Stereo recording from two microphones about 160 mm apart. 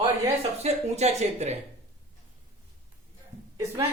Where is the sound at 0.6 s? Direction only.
45° right (ahead or behind).